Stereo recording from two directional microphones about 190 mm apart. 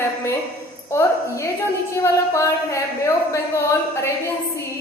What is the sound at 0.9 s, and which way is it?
A woman's voice, 15° left (ahead or behind).